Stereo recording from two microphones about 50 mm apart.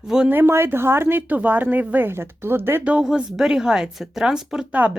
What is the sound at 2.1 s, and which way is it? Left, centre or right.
Speech, right.